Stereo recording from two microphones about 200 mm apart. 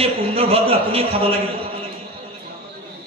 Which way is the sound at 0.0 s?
30° right (ahead or behind).